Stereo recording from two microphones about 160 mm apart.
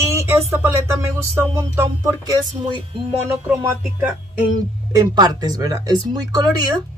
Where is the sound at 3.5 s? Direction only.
5° right (ahead or behind).